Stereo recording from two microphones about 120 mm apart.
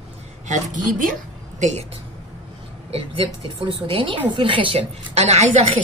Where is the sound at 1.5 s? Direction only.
75° right (ahead or behind).